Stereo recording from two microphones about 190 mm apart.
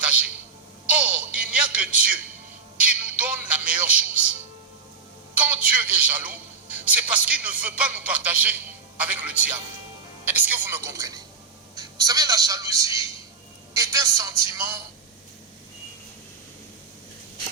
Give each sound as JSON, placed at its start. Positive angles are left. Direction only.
{"t": 0.9, "sound": "music", "side_deg": -5}
{"t": 2.7, "sound": "a man's voice", "side_deg": -5}